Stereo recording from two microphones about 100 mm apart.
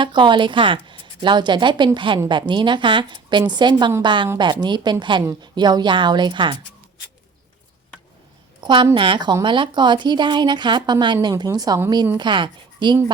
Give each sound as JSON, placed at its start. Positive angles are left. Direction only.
{"t": 0.0, "sound": "a woman's voice", "side_deg": -55}
{"t": 8.6, "sound": "a woman's voice", "side_deg": -50}
{"t": 12.1, "sound": "a woman's voice", "side_deg": -50}